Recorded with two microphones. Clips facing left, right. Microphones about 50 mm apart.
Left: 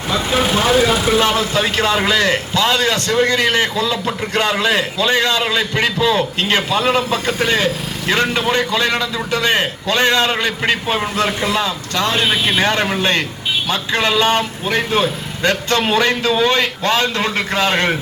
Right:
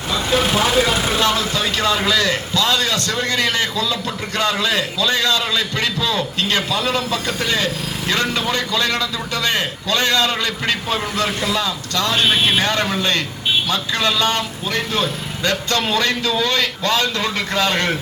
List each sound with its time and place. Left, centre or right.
0.1 s speech: centre
1.2 s a man's voice: left